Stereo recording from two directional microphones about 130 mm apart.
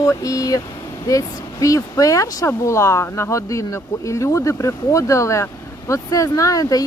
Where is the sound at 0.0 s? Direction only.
25° left (ahead or behind).